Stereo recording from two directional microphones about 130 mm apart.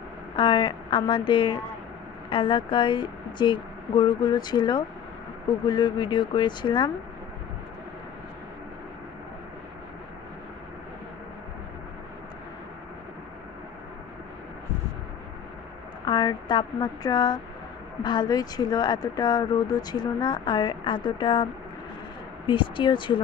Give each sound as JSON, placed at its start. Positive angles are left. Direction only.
{"t": 0.4, "sound": "speech", "side_deg": 35}
{"t": 16.1, "sound": "speech", "side_deg": 30}
{"t": 22.5, "sound": "speech", "side_deg": 40}